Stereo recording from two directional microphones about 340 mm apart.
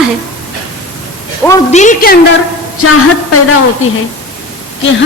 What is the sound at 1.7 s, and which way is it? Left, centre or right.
Speech, left.